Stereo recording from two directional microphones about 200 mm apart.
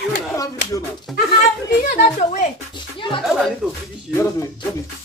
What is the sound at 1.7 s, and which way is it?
Speech, 40° left (ahead or behind).